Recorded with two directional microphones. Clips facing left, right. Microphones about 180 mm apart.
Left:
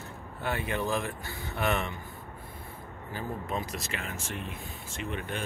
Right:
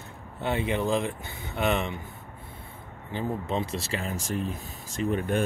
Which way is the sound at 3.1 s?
25° right (ahead or behind).